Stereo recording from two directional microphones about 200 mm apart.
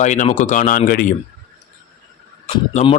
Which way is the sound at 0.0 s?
35° left (ahead or behind).